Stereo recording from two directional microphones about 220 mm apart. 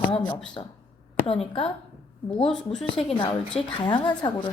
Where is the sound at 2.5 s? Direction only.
5° left (ahead or behind).